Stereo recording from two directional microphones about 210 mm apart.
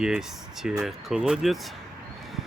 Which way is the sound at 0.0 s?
5° right (ahead or behind).